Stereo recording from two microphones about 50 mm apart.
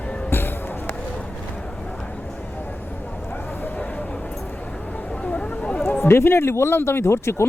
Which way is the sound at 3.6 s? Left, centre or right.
Left.